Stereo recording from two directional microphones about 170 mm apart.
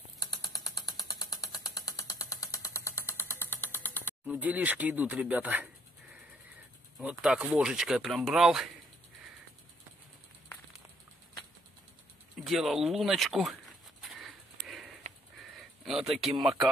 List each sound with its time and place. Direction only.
0.2 s mechanisms: 25° left (ahead or behind)
4.3 s speech: 10° right (ahead or behind)
7.0 s speech: 5° right (ahead or behind)
12.4 s a sound: centre (ahead or behind)
14.7 s sniff: centre (ahead or behind)
15.5 s speech: centre (ahead or behind)